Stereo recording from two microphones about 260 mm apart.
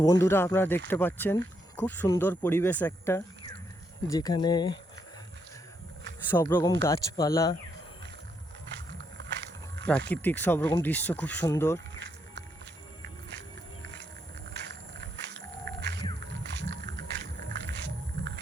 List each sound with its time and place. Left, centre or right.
0.0 s speech: centre
6.2 s speech: centre
10.1 s speech: centre
11.9 s music: right
15.8 s wild animals: right
16.6 s ratchet: right
17.5 s music: right